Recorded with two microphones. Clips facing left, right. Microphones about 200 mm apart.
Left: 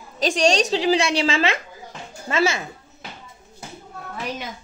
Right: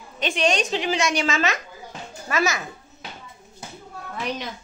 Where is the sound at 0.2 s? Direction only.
35° left (ahead or behind).